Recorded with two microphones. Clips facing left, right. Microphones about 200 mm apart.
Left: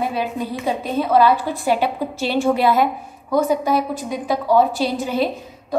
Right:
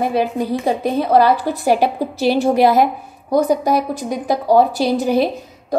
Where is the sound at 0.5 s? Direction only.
40° right (ahead or behind).